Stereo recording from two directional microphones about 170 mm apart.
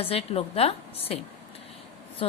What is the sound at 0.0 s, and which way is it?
A woman's voice, 35° left (ahead or behind).